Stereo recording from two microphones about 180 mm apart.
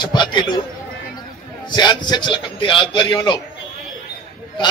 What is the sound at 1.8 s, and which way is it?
A man's voice, 25° left (ahead or behind).